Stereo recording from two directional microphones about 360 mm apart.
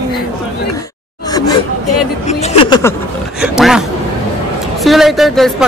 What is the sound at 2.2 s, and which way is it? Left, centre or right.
Speech, centre.